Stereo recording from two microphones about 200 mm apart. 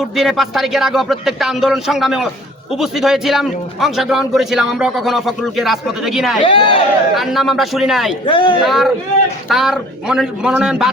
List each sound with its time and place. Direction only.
0.2 s a man's voice: centre (ahead or behind)
6.4 s a man's voice: 25° left (ahead or behind)
7.1 s a man's voice: centre (ahead or behind)
8.3 s a man's voice: 25° left (ahead or behind)
8.6 s a man's voice: centre (ahead or behind)